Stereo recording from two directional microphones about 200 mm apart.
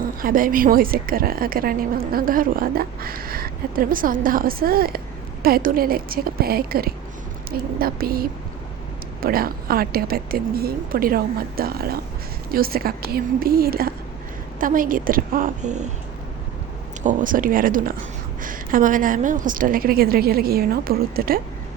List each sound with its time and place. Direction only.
0.0 s a woman's voice: 45° right (ahead or behind)
17.0 s a woman's voice: 40° right (ahead or behind)